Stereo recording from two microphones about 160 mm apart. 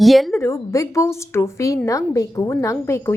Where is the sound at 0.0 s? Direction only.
Centre (ahead or behind).